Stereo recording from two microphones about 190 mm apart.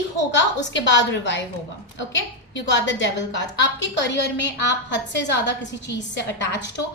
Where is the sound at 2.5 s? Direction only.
70° left (ahead or behind).